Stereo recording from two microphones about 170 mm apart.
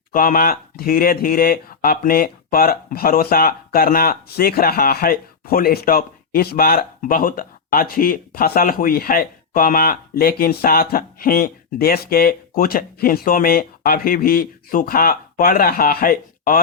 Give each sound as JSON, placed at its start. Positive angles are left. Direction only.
{"t": 0.1, "sound": "speech", "side_deg": 55}